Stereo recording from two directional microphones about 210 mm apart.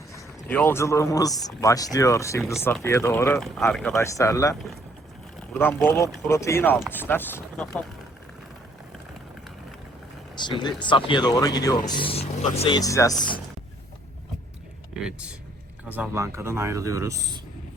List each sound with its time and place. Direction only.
0.1 s speech: 15° left (ahead or behind)
5.5 s speech: 10° left (ahead or behind)
10.3 s speech: 20° left (ahead or behind)
14.9 s speech: 5° right (ahead or behind)